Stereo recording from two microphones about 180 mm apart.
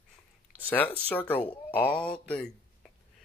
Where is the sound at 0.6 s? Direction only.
10° left (ahead or behind).